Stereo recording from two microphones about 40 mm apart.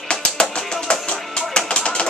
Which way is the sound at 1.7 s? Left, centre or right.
Left.